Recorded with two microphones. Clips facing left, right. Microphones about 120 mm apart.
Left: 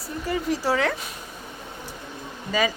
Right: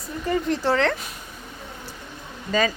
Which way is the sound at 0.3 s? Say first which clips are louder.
Right 2 dB; 5° left (ahead or behind).